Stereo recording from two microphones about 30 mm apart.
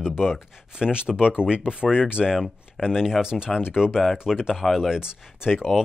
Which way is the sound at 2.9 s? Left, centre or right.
Centre.